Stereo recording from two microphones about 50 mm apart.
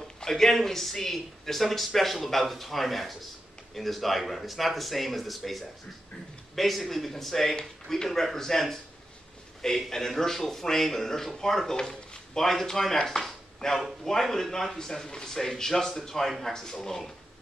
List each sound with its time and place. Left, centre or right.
0.2 s a man's voice: centre